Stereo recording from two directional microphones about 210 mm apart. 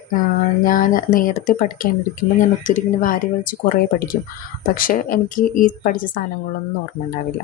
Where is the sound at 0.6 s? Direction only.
40° left (ahead or behind).